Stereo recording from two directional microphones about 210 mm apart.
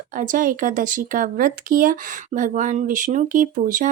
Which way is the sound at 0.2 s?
40° right (ahead or behind).